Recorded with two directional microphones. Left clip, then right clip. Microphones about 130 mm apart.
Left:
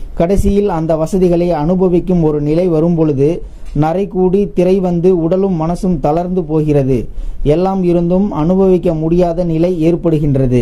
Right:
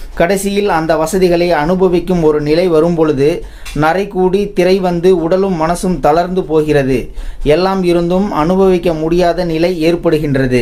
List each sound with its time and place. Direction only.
0.2 s speech: 50° left (ahead or behind)
6.0 s speech: 45° left (ahead or behind)